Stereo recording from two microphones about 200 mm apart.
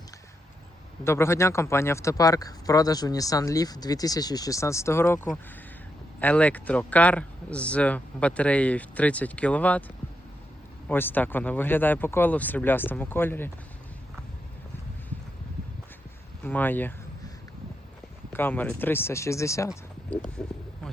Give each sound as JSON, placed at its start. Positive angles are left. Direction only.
{"t": 1.0, "sound": "speech", "side_deg": 15}
{"t": 10.8, "sound": "speech", "side_deg": 10}
{"t": 16.4, "sound": "speech", "side_deg": 10}
{"t": 18.3, "sound": "speech", "side_deg": 10}
{"t": 20.4, "sound": "speech", "side_deg": 5}